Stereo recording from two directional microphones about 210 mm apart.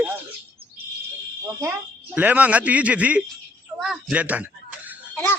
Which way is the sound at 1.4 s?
10° right (ahead or behind).